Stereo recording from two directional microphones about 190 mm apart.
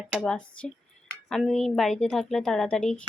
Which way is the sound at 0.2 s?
5° left (ahead or behind).